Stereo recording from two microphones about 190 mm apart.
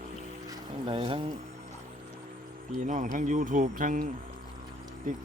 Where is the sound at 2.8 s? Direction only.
40° right (ahead or behind).